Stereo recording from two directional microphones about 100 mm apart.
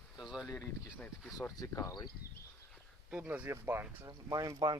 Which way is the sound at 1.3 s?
35° left (ahead or behind).